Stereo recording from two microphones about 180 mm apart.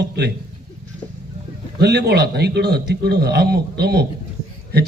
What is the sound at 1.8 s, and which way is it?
A man's voice, 70° right (ahead or behind).